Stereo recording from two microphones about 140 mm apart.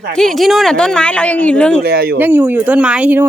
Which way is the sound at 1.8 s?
90° right.